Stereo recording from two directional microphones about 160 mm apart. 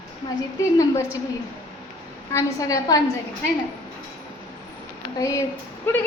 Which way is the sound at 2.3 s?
20° left (ahead or behind).